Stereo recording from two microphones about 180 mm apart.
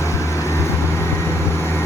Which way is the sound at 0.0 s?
15° left (ahead or behind).